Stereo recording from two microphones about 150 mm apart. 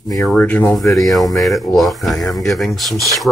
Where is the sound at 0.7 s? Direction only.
Centre (ahead or behind).